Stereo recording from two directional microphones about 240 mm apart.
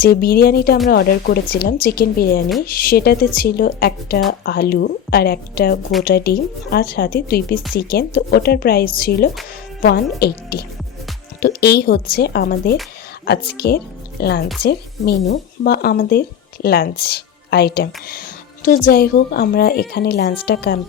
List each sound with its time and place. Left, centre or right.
0.0 s a woman's voice: left